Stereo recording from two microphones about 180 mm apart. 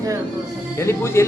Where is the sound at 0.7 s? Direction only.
15° left (ahead or behind).